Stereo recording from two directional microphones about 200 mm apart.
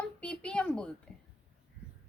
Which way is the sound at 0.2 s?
5° left (ahead or behind).